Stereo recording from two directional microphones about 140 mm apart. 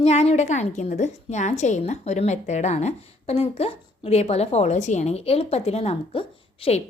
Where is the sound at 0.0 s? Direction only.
50° left (ahead or behind).